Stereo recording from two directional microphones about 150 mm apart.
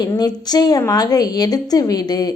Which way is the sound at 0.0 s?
25° left (ahead or behind).